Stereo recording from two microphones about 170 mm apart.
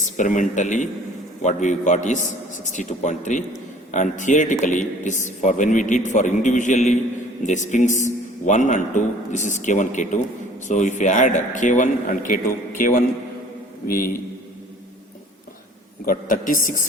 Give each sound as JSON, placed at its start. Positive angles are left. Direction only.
{"t": 0.0, "sound": "a man's voice", "side_deg": 50}
{"t": 16.0, "sound": "a man's voice", "side_deg": 55}